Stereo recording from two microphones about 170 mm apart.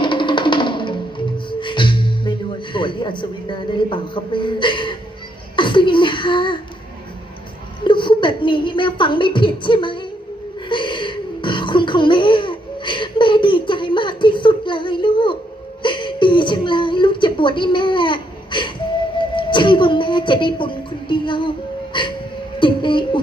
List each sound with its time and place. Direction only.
0.0 s music: 30° left (ahead or behind)
2.7 s speech: 30° left (ahead or behind)
7.9 s speech: 30° left (ahead or behind)
10.7 s a sound: 30° left (ahead or behind)
15.8 s whimper: 30° left (ahead or behind)
19.4 s music: 30° left (ahead or behind)
21.9 s a sound: 30° left (ahead or behind)
22.6 s speech: 30° left (ahead or behind)